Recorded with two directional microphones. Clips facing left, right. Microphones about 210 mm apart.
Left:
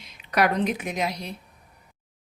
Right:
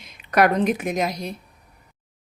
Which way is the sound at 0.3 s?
50° right (ahead or behind).